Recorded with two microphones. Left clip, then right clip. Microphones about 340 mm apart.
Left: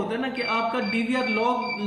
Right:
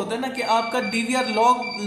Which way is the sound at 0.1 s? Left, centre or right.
Centre.